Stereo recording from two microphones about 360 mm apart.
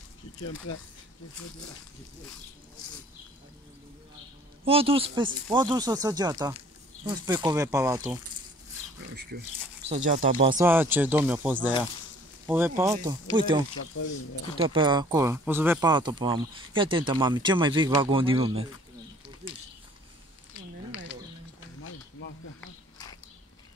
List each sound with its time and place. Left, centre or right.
0.4 s speech: left
4.6 s speech: centre
9.1 s speech: right
10.6 s speech: centre
13.9 s speech: left
14.6 s speech: centre
19.4 s a sound: centre